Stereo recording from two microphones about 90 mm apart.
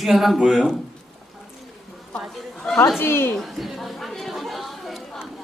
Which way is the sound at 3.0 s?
25° left (ahead or behind).